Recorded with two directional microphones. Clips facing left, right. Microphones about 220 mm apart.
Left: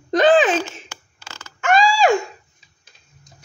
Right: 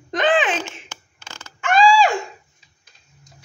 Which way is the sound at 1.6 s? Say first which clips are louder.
Right 1 dB; 40° left (ahead or behind).